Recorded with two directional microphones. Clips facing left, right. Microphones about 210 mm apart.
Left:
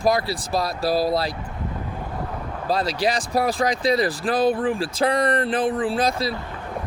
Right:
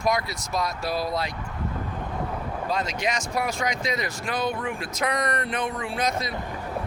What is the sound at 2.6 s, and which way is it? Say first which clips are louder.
Speech: left 6 dB; 35° left (ahead or behind).